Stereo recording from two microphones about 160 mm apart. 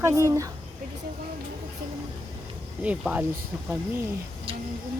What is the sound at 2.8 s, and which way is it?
Speech, 10° right (ahead or behind).